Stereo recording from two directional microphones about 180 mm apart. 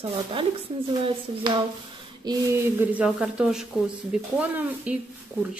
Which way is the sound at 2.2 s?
15° right (ahead or behind).